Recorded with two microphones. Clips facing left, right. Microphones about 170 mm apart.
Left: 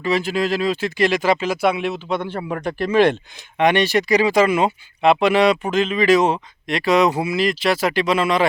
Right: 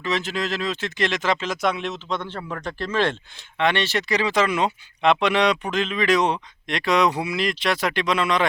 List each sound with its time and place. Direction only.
0.0 s speech: 10° left (ahead or behind)